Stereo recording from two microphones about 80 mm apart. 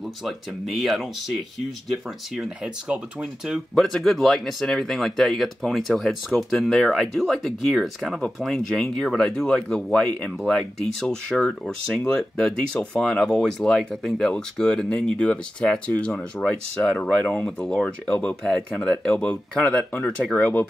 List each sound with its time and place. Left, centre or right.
0.0 s speech: centre
3.7 s speech: centre
17.5 s speech: centre